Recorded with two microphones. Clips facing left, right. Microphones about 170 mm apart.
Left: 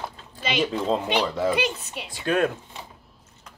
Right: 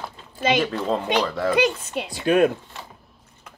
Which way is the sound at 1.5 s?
50° right (ahead or behind).